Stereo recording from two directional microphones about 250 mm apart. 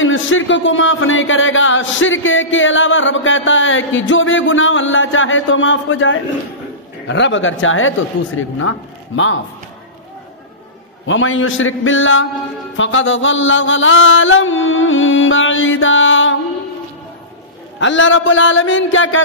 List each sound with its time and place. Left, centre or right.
0.0 s speech: left
11.1 s speech: left
17.7 s speech: left